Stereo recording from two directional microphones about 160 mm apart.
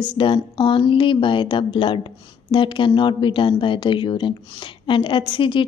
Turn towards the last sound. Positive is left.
turn(degrees=30)  # may be behind; listen again after turning